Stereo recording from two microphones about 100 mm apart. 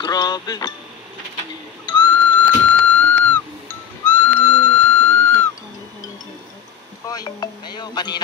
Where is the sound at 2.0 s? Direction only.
15° left (ahead or behind).